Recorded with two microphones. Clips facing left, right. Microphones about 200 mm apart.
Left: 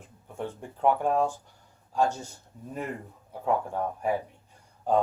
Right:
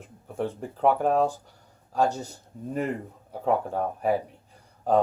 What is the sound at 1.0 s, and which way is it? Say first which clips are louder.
Speech: right 3 dB; 35° right (ahead or behind).